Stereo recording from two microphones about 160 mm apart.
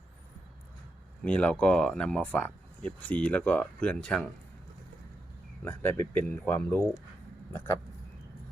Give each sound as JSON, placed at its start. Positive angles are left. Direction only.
{"t": 1.2, "sound": "speech", "side_deg": 10}
{"t": 5.6, "sound": "speech", "side_deg": 10}